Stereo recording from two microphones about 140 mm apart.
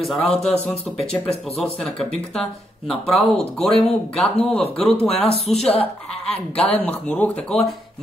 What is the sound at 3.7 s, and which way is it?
Speech, 45° left (ahead or behind).